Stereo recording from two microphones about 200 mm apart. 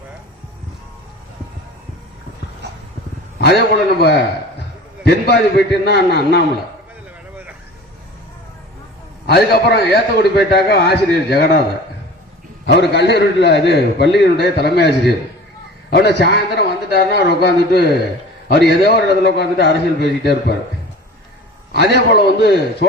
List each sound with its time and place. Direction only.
3.4 s a man's voice: 55° left (ahead or behind)
9.2 s a man's voice: 55° left (ahead or behind)
12.6 s a man's voice: 55° left (ahead or behind)
21.9 s a man's voice: 55° left (ahead or behind)